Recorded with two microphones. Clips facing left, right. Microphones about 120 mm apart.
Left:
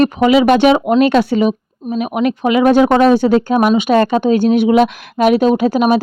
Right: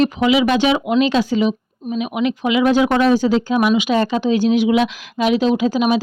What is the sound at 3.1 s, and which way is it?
Speech, 55° left (ahead or behind).